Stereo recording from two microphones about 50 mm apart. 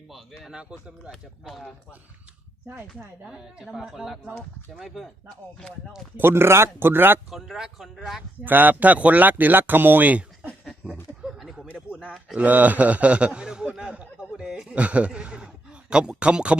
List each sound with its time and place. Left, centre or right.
0.1 s speech: centre
0.5 s a man's voice: right
1.1 s speech: centre
3.2 s a man's voice: centre
6.1 s speech: right
7.3 s speech: centre
8.4 s a man's voice: right
11.2 s a sound: centre
11.9 s a man's voice: right
12.4 s a man's voice: right